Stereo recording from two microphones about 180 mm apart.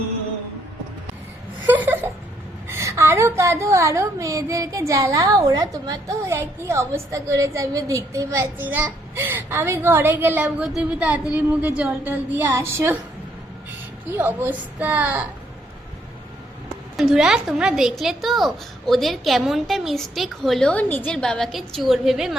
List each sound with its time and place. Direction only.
1.6 s a sound: 10° right (ahead or behind)
2.6 s a woman's voice: 15° right (ahead or behind)
17.0 s a woman's voice: centre (ahead or behind)